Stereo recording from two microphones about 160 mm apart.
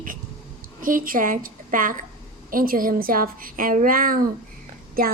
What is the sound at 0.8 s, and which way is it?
A woman's voice, 60° right (ahead or behind).